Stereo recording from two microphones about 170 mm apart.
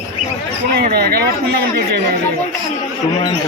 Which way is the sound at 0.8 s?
65° right (ahead or behind).